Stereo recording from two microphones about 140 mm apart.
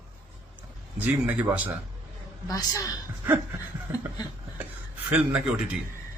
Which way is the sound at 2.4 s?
25° left (ahead or behind).